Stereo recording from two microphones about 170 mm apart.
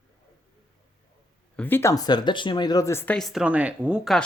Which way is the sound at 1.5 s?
10° left (ahead or behind).